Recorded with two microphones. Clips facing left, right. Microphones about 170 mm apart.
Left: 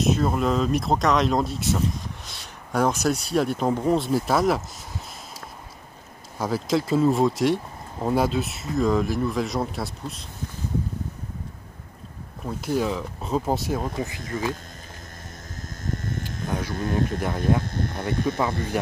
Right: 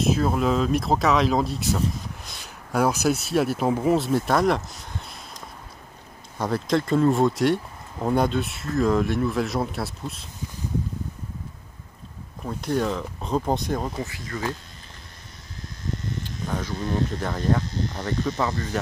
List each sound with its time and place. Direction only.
0.0 s speech: centre (ahead or behind)
6.3 s speech: 5° left (ahead or behind)
12.4 s speech: 5° left (ahead or behind)
14.0 s speech: 20° left (ahead or behind)
15.8 s a sound: 50° left (ahead or behind)
16.4 s a sound: 10° left (ahead or behind)
16.7 s speech: 50° left (ahead or behind)
17.6 s cricket: 50° left (ahead or behind)
18.1 s speech: 55° left (ahead or behind)